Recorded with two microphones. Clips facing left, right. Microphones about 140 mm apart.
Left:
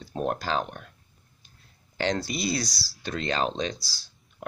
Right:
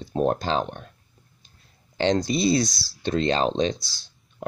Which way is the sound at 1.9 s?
20° right (ahead or behind).